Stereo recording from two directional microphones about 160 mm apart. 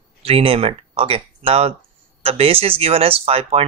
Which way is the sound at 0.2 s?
35° right (ahead or behind).